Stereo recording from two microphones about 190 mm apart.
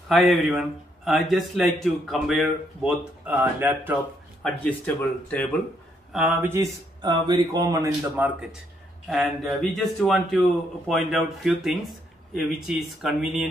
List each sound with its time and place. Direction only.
0.1 s a man's voice: centre (ahead or behind)
4.4 s speech: 5° left (ahead or behind)
6.1 s speech: 10° right (ahead or behind)
9.1 s a man's voice: centre (ahead or behind)